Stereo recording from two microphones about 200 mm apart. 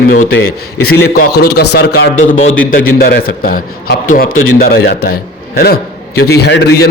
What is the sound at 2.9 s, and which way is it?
A man's voice, 50° left (ahead or behind).